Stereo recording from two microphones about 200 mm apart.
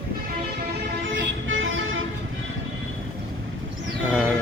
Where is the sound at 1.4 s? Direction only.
75° right (ahead or behind).